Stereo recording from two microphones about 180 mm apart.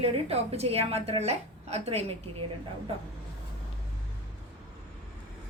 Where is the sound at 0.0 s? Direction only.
35° right (ahead or behind).